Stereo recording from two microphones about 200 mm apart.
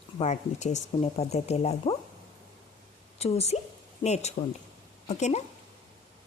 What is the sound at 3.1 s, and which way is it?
A woman's voice, 30° left (ahead or behind).